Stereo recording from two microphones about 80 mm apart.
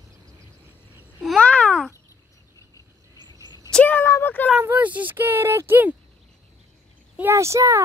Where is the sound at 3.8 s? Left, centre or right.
Left.